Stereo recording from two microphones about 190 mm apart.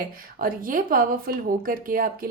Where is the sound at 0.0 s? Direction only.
50° right (ahead or behind).